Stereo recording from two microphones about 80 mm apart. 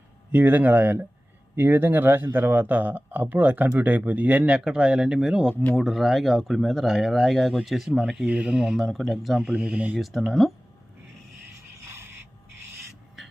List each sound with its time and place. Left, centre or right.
0.3 s speech: right
10.0 s speech: centre
11.9 s a sound: right